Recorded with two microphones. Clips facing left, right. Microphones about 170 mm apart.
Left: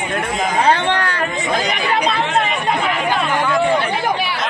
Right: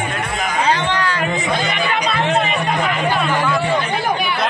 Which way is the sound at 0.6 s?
60° left (ahead or behind).